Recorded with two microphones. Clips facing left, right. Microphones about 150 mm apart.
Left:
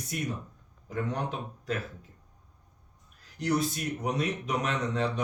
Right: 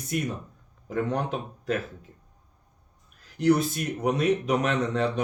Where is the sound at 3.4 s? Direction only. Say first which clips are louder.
Right 6 dB; 60° right (ahead or behind).